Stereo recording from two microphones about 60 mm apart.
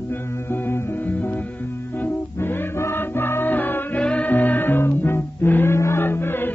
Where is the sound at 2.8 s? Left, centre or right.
Left.